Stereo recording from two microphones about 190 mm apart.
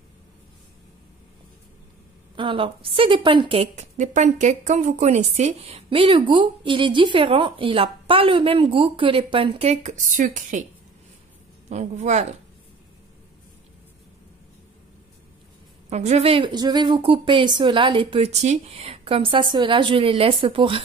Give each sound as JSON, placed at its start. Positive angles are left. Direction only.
{"t": 2.3, "sound": "a woman's voice", "side_deg": -25}
{"t": 11.7, "sound": "a woman's voice", "side_deg": -40}
{"t": 15.9, "sound": "a woman's voice", "side_deg": -35}